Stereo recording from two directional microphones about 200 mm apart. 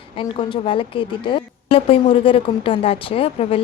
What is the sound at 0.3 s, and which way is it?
A woman's voice, 25° left (ahead or behind).